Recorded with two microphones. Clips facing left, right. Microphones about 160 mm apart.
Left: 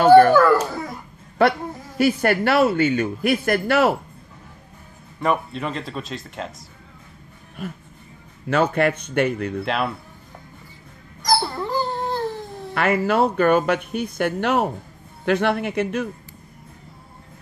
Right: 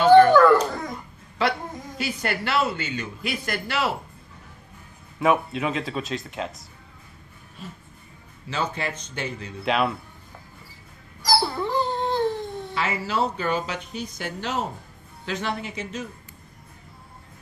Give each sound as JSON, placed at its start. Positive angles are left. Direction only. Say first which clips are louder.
{"t": 0.3, "sound": "dog", "louder": "even", "side_deg": 5}
{"t": 1.4, "sound": "speech", "louder": "left 6 dB", "side_deg": 55}
{"t": 5.2, "sound": "speech", "louder": "right 1 dB", "side_deg": -5}
{"t": 8.5, "sound": "speech", "louder": "left 10 dB", "side_deg": 60}
{"t": 9.7, "sound": "speech", "louder": "right 3 dB", "side_deg": 0}
{"t": 11.2, "sound": "dog", "louder": "left 1 dB", "side_deg": 0}
{"t": 12.7, "sound": "speech", "louder": "left 8 dB", "side_deg": 55}